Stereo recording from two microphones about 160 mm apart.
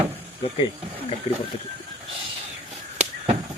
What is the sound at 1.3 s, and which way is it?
Speech, 40° left (ahead or behind).